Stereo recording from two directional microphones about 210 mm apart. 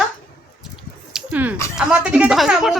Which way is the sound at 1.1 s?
5° right (ahead or behind).